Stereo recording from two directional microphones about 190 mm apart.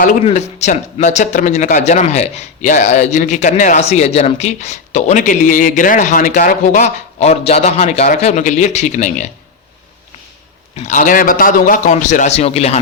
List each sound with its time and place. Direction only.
0.0 s speech: 40° left (ahead or behind)
10.8 s speech: 40° left (ahead or behind)